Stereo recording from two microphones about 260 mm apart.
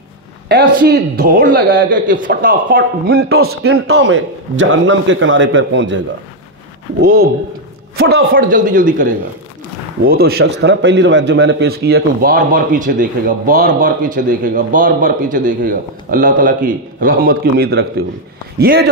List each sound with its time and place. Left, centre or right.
0.5 s a man's voice: right
7.0 s a man's voice: right
8.0 s a man's voice: right
8.4 s a man's voice: right